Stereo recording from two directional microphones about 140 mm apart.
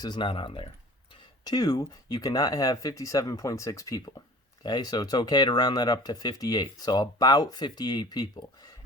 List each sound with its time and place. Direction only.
0.0 s speech: 30° left (ahead or behind)